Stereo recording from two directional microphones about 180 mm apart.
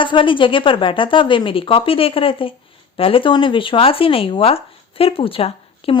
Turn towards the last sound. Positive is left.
turn(degrees=30)  # may be behind; listen again after turning